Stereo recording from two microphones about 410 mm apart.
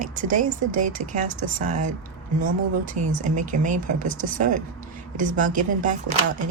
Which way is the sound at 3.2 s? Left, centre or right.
Centre.